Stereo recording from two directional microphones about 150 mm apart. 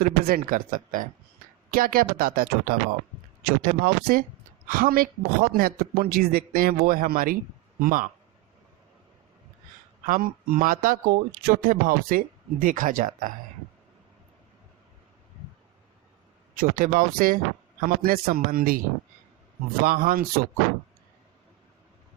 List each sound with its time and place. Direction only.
0.0 s speech: 80° right; by 1.0 s 65° right (ahead or behind)
1.7 s a man's voice: 75° right (ahead or behind)
10.1 s speech: 80° right
16.6 s speech: 65° right (ahead or behind)
19.8 s speech: 75° right (ahead or behind)